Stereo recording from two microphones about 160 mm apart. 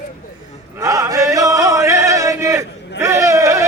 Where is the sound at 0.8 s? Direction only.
20° right (ahead or behind).